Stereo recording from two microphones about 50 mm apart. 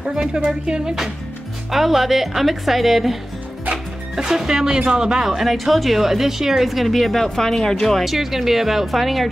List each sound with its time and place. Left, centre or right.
0.0 s speech: centre
0.7 s music: centre
1.7 s speech: centre
8.0 s speech: centre